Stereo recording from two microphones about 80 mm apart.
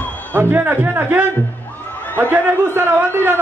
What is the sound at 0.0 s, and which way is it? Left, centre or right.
Music, left.